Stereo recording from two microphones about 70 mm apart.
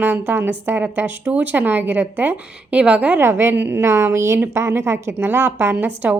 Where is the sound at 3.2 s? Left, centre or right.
Right.